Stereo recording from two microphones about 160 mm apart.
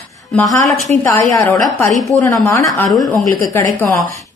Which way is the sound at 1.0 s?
15° left (ahead or behind).